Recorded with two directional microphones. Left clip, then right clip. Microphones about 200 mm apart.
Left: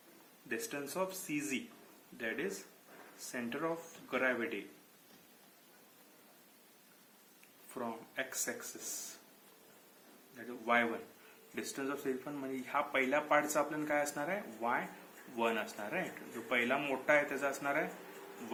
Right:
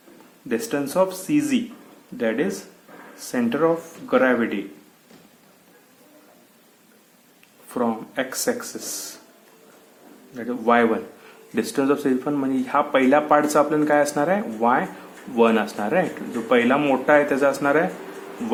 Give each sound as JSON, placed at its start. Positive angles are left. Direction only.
{"t": 0.4, "sound": "speech", "side_deg": -40}
{"t": 7.7, "sound": "speech", "side_deg": -40}
{"t": 10.3, "sound": "speech", "side_deg": -40}